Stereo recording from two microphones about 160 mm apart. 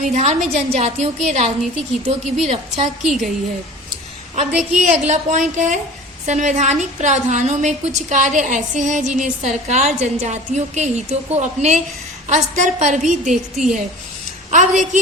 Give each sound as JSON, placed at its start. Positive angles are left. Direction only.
{"t": 0.1, "sound": "a woman's voice", "side_deg": -45}
{"t": 3.0, "sound": "a woman's voice", "side_deg": 0}
{"t": 4.8, "sound": "a woman's voice", "side_deg": -45}
{"t": 13.3, "sound": "a woman's voice", "side_deg": -5}
{"t": 14.5, "sound": "a woman's voice", "side_deg": -50}